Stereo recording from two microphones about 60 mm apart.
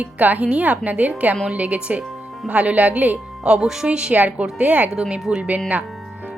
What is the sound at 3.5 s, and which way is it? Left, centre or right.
A woman's voice, centre.